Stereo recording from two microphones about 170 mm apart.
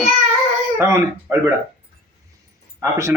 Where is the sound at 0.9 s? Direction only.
15° right (ahead or behind).